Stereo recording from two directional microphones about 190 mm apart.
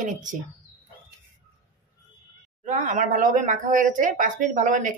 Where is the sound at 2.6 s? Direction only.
40° right (ahead or behind).